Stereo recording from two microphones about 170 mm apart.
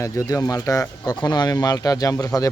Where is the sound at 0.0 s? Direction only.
20° left (ahead or behind).